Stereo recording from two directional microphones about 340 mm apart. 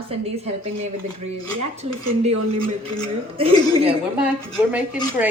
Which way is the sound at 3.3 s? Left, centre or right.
Centre.